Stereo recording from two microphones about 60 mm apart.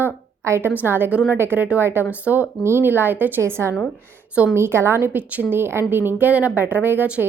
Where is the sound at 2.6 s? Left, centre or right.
Right.